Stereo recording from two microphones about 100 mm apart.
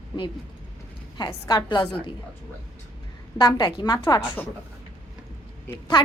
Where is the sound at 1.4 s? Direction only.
45° left (ahead or behind).